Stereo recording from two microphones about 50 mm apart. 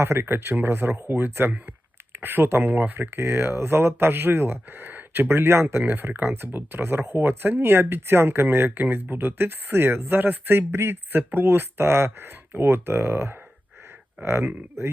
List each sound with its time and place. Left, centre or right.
0.0 s speech: right
3.2 s speech: right
5.9 s speech: right
8.4 s speech: right
11.2 s speech: right